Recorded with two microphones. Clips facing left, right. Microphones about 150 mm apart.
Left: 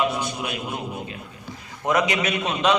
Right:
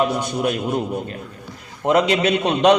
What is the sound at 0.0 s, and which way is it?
Speech, 45° right (ahead or behind).